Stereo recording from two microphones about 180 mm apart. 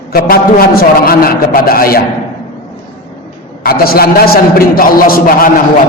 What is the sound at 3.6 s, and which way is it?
A man's voice, 55° left (ahead or behind).